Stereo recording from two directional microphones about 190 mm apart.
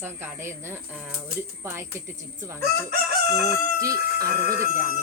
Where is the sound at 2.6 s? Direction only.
55° right (ahead or behind).